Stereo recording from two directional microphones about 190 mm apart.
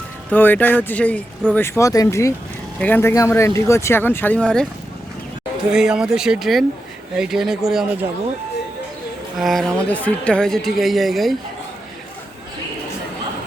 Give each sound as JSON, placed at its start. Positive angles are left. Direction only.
{"t": 0.3, "sound": "speech", "side_deg": 10}
{"t": 5.7, "sound": "a woman's voice", "side_deg": -5}
{"t": 9.4, "sound": "a woman's voice", "side_deg": 0}